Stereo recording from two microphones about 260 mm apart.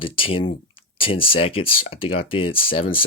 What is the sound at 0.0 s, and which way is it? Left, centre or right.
Speech, left.